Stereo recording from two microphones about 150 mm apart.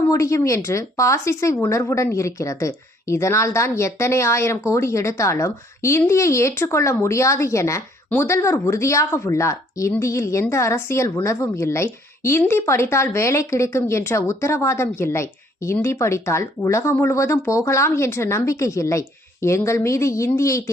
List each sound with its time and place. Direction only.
0.1 s a woman's voice: 20° left (ahead or behind)